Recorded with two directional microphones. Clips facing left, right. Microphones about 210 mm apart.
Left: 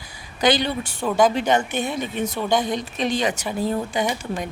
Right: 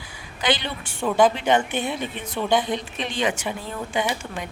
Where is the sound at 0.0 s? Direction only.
40° left (ahead or behind).